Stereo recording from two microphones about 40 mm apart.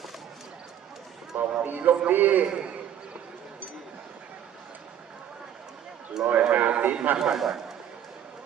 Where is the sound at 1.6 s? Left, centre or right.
Right.